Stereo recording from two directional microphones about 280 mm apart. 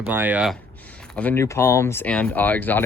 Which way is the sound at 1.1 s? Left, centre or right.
Centre.